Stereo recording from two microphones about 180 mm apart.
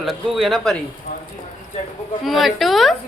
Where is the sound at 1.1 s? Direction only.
45° left (ahead or behind).